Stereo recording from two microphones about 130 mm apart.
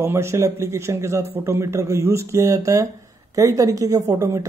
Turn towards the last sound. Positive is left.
turn(degrees=-25)  # may be behind; listen again after turning